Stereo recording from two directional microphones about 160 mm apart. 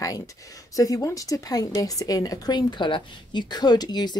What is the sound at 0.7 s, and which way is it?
Speech, 20° left (ahead or behind).